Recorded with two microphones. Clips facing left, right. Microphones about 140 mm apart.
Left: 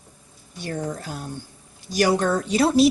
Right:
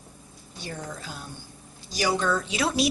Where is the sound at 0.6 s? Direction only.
50° left (ahead or behind).